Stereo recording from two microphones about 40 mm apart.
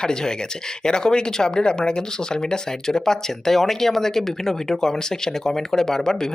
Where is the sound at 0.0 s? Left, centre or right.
Centre.